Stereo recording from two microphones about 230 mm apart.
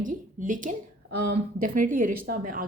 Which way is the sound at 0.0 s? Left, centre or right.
Right.